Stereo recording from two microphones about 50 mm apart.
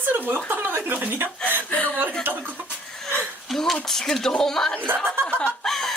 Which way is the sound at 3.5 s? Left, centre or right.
Centre.